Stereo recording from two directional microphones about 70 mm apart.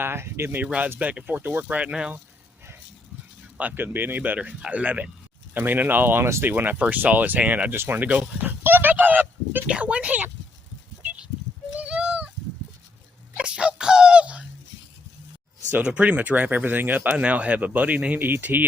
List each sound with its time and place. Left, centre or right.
0.0 s speech: right
0.9 s speech: right
3.6 s speech: right
6.2 s speech: right
6.5 s speech: right
9.6 s speech: centre
11.8 s a sound: centre
13.3 s a sound: centre
15.7 s speech: centre